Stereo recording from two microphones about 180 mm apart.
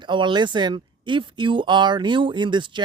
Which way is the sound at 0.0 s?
25° right (ahead or behind).